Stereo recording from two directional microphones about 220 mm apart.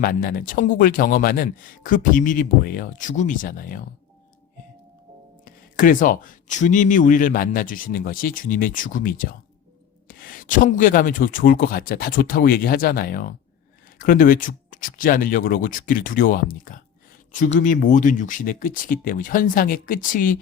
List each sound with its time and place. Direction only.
0.0 s speech: 40° left (ahead or behind)
5.5 s speech: 40° left (ahead or behind)